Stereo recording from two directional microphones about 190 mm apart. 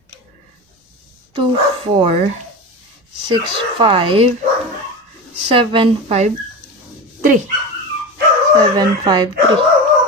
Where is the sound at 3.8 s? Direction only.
25° right (ahead or behind).